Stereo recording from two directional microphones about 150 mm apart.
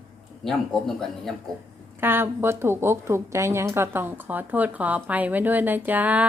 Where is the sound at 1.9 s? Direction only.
15° right (ahead or behind).